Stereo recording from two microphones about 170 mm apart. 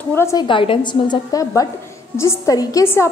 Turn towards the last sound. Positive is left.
turn(degrees=15)  # may be behind; listen again after turning